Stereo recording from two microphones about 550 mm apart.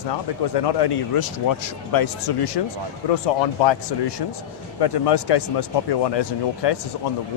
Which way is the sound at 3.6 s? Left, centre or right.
Left.